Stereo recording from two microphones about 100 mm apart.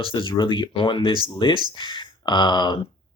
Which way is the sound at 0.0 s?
55° left (ahead or behind).